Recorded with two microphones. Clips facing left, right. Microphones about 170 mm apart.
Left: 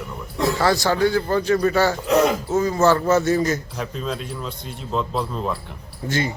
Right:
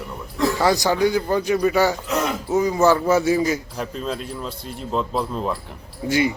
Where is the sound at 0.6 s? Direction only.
15° right (ahead or behind).